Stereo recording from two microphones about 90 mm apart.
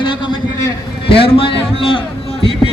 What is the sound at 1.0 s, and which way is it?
Speech, 80° left.